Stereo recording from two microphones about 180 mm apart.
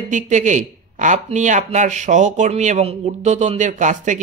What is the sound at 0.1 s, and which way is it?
Speech, 40° right (ahead or behind).